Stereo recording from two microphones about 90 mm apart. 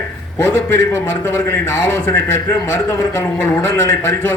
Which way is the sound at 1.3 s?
25° left (ahead or behind).